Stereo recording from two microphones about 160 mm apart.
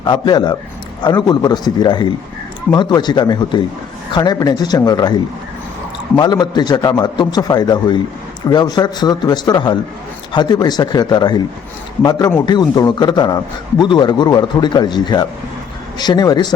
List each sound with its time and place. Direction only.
0.0 s a man's voice: 30° left (ahead or behind)
6.1 s a man's voice: 25° left (ahead or behind)
12.5 s a man's voice: 25° left (ahead or behind)